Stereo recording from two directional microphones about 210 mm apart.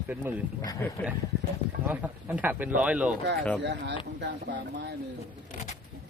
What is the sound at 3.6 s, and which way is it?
Speech, 55° right (ahead or behind).